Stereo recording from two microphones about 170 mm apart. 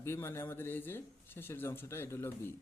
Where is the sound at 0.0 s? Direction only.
15° left (ahead or behind).